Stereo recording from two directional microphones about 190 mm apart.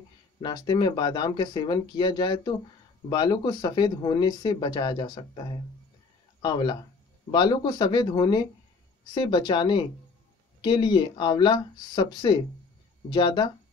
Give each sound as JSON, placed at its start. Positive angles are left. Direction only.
{"t": 0.4, "sound": "speech", "side_deg": 20}